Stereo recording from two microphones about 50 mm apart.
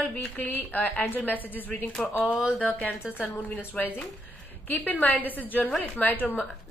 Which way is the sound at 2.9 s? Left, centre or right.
Left.